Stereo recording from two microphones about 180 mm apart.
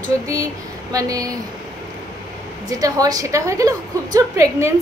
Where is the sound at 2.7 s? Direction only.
20° right (ahead or behind).